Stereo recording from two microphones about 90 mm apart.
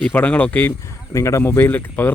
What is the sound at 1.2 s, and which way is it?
Speech, 35° left (ahead or behind).